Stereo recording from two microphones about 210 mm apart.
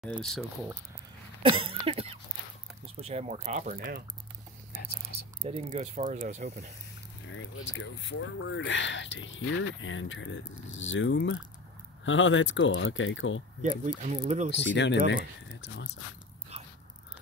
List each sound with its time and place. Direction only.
0.0 s speech: 5° left (ahead or behind)
1.4 s a sound: 25° right (ahead or behind)
3.0 s speech: 30° right (ahead or behind)
5.4 s speech: 30° right (ahead or behind)
7.2 s speech: 65° left (ahead or behind)
13.6 s speech: 35° right (ahead or behind)
14.6 s speech: 55° left (ahead or behind)